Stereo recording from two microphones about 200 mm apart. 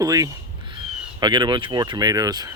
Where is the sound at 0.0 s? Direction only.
15° right (ahead or behind).